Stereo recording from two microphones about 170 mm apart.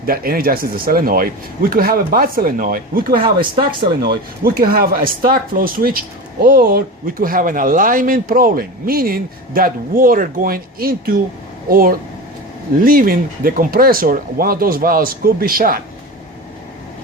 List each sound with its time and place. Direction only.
0.0 s speech: 60° right (ahead or behind)
3.2 s speech: 30° right (ahead or behind)
4.4 s speech: 60° right (ahead or behind)